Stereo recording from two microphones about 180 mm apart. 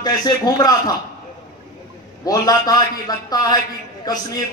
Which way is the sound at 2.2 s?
20° left (ahead or behind).